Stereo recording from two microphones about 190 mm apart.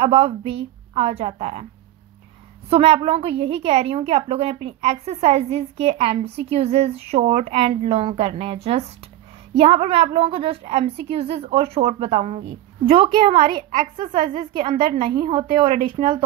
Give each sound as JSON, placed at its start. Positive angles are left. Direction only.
{"t": 0.0, "sound": "a woman's voice", "side_deg": -30}
{"t": 2.7, "sound": "a woman's voice", "side_deg": -30}
{"t": 15.1, "sound": "speech", "side_deg": -20}